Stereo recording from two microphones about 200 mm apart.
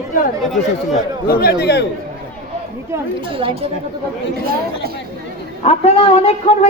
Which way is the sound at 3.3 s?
25° right (ahead or behind).